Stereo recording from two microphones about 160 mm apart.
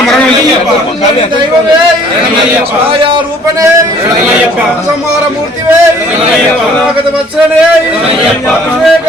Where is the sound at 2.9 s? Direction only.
30° right (ahead or behind).